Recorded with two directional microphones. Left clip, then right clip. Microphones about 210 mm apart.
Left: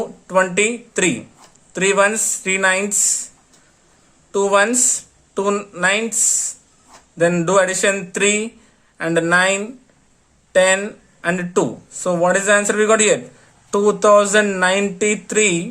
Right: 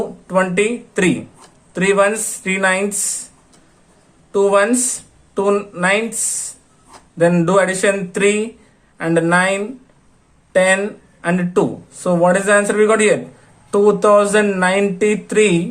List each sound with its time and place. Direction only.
0.0 s speech: 15° left (ahead or behind)
4.3 s speech: 15° left (ahead or behind)